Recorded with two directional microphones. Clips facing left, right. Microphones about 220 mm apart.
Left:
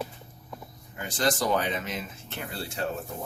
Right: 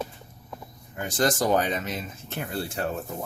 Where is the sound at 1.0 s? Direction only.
45° right (ahead or behind).